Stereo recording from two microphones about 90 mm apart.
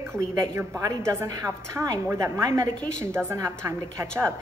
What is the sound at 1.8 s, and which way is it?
Speech, 15° right (ahead or behind).